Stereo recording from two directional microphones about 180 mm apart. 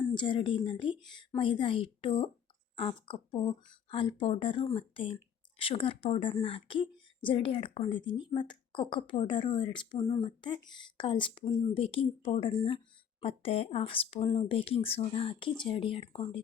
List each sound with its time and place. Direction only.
0.1 s a woman's voice: 25° left (ahead or behind)